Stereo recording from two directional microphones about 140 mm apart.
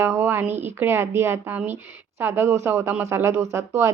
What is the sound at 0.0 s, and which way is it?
Speech, 15° right (ahead or behind).